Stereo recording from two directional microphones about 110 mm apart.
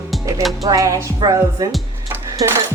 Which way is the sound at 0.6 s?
30° right (ahead or behind).